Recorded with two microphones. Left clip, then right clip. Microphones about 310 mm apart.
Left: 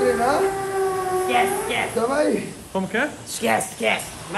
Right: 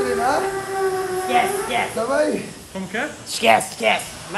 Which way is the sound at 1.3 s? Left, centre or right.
Right.